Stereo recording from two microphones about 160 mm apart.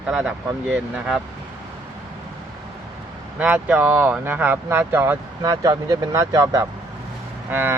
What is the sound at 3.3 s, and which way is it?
Speech, 10° right (ahead or behind).